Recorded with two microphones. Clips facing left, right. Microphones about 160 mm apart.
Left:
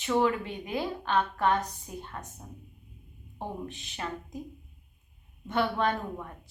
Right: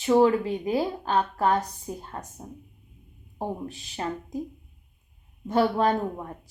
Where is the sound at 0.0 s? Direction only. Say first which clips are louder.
Right 7 dB; 35° right (ahead or behind).